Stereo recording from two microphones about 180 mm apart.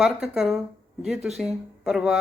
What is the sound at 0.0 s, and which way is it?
Speech, centre (ahead or behind).